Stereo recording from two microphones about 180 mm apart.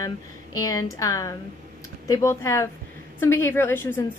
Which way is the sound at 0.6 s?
20° left (ahead or behind).